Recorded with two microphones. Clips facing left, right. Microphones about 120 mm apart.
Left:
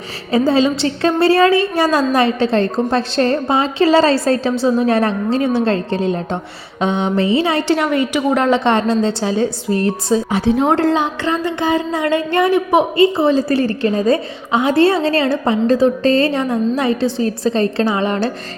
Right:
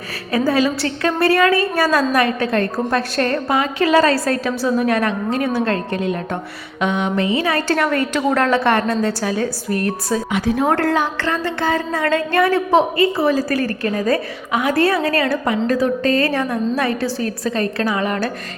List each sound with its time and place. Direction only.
0.3 s a woman's voice: 25° left (ahead or behind)